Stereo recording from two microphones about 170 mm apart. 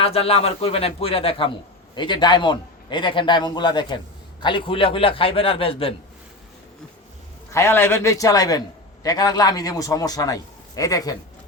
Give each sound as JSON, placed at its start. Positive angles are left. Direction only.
{"t": 0.0, "sound": "a man's voice", "side_deg": 35}
{"t": 7.5, "sound": "a man's voice", "side_deg": 15}